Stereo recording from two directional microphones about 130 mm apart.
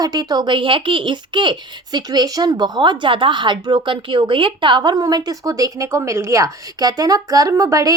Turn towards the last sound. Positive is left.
turn(degrees=-25)  # may be behind; listen again after turning